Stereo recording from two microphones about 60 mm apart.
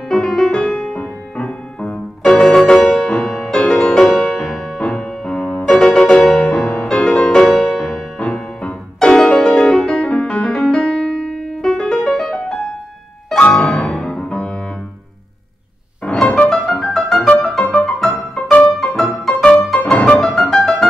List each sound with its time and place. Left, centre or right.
0.1 s music: centre
8.2 s music: centre
13.4 s music: centre
16.0 s music: centre
16.4 s music: centre
19.9 s music: centre
20.2 s music: centre